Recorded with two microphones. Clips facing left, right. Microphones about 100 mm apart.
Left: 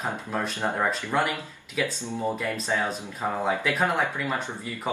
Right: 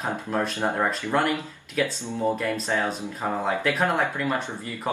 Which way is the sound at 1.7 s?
15° left (ahead or behind).